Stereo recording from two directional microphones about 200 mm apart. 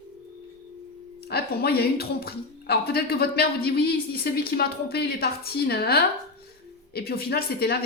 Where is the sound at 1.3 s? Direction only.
50° left (ahead or behind).